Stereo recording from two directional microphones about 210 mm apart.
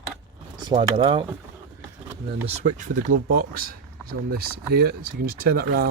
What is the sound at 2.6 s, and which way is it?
Speech, 35° right (ahead or behind).